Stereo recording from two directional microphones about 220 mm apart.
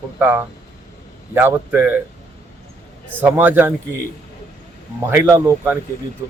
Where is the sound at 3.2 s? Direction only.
10° right (ahead or behind).